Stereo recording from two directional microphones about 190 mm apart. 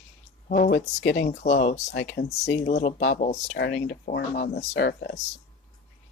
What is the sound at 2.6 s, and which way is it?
Speech, 40° left (ahead or behind).